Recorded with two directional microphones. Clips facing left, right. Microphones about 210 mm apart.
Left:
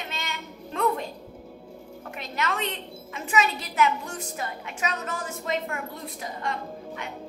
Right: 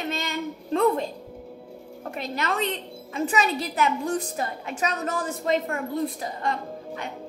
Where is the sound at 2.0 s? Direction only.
35° right (ahead or behind).